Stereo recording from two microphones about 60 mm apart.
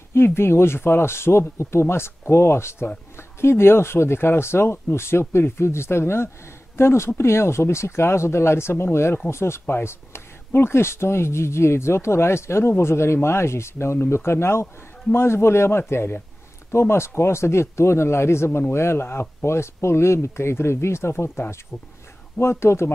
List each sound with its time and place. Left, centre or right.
0.1 s speech: left